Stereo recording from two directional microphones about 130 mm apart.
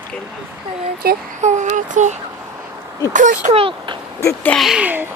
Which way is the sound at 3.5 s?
45° right (ahead or behind).